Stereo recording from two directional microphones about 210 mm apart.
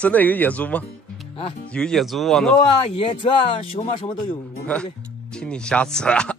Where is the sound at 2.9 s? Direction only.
25° left (ahead or behind).